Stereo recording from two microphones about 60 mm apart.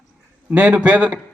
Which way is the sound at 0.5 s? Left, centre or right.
Right.